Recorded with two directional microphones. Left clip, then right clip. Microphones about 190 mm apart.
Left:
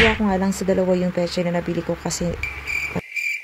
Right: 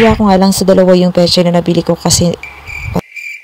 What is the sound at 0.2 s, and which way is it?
Speech, 40° right (ahead or behind).